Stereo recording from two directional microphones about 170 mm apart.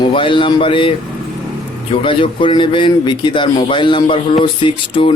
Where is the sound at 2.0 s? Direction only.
30° left (ahead or behind).